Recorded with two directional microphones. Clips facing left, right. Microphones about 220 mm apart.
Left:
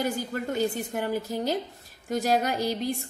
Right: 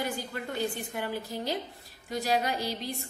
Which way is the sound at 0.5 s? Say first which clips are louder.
Left 4 dB; 45° left (ahead or behind).